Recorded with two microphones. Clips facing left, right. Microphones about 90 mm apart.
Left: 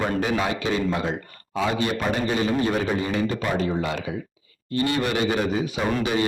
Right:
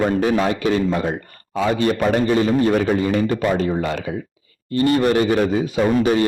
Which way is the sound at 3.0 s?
45° right (ahead or behind).